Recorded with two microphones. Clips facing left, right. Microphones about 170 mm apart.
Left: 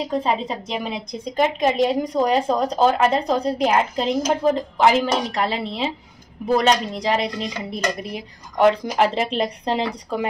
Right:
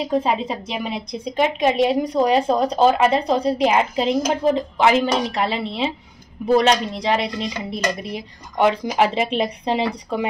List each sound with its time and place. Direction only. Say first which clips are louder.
0.0 s a woman's voice: right 2 dB; 10° right (ahead or behind)